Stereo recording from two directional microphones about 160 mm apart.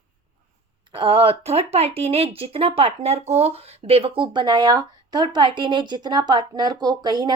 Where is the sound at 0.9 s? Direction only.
35° right (ahead or behind).